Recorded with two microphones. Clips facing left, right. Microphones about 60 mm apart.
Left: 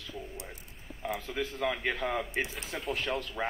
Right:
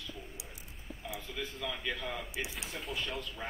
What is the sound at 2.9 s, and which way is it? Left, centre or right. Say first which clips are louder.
Speech: left 7 dB; left.